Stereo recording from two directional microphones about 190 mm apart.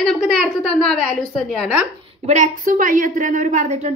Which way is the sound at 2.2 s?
40° right (ahead or behind).